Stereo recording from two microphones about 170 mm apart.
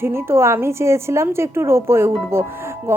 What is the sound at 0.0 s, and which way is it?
Speech, 15° right (ahead or behind).